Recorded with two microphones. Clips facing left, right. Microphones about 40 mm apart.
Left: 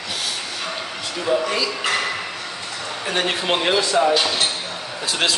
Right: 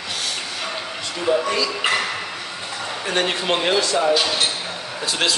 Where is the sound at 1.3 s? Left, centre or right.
Centre.